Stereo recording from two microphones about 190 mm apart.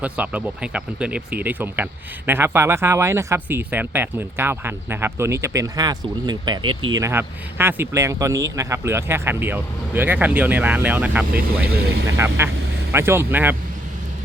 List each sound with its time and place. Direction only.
0.0 s speech: 10° right (ahead or behind)
11.3 s speech: 55° right (ahead or behind)
12.0 s speech: 15° right (ahead or behind)